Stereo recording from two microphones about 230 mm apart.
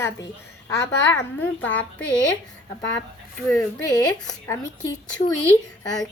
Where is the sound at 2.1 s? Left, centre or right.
Left.